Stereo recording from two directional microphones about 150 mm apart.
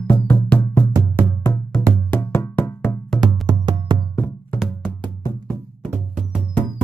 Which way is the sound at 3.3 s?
30° right (ahead or behind).